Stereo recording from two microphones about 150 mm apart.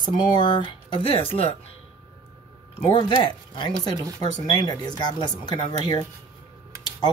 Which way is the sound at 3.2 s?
30° left (ahead or behind).